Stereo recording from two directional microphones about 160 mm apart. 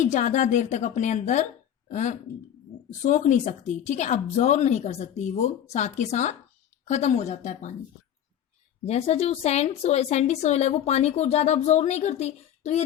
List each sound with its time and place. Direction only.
0.0 s speech: 50° left (ahead or behind)
8.8 s speech: 40° left (ahead or behind)